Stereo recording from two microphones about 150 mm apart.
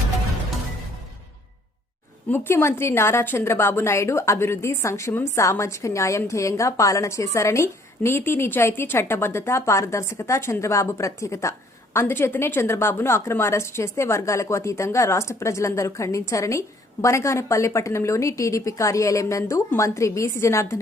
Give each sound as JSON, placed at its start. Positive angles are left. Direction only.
{"t": 2.3, "sound": "a woman's voice", "side_deg": 15}